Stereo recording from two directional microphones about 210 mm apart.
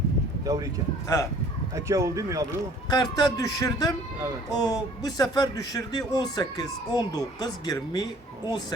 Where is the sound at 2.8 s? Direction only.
20° left (ahead or behind).